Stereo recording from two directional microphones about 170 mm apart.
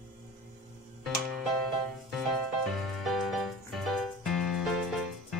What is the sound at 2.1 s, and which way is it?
Music, centre (ahead or behind).